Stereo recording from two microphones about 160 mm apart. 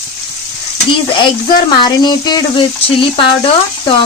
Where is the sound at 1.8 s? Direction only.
25° left (ahead or behind).